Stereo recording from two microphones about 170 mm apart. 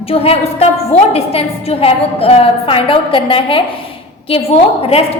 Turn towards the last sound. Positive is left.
turn(degrees=35)  # may be behind; listen again after turning